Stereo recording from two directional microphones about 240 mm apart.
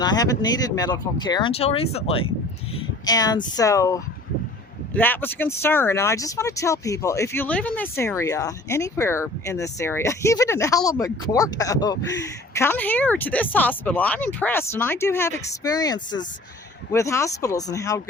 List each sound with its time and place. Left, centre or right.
0.0 s speech: centre